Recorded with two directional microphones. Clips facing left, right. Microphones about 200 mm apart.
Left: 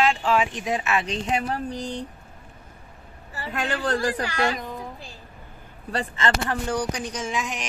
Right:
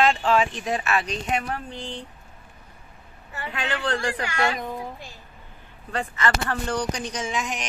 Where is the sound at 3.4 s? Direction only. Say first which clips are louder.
Left 2 dB; 40° left (ahead or behind).